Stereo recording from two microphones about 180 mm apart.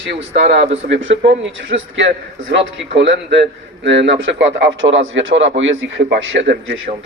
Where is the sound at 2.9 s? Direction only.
75° right (ahead or behind).